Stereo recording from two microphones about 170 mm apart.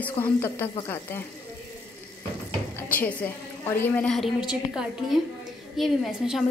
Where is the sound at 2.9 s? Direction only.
10° left (ahead or behind).